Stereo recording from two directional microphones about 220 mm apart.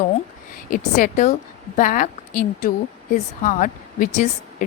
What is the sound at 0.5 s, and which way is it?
A woman's voice, 35° left (ahead or behind).